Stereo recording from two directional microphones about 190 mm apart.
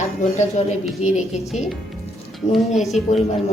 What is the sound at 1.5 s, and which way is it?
Speech, centre (ahead or behind).